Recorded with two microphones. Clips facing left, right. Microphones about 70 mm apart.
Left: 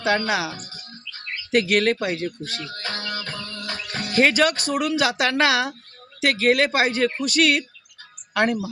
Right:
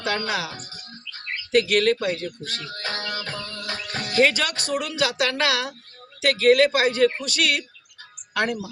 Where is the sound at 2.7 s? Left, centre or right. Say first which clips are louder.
Right 2 dB; right.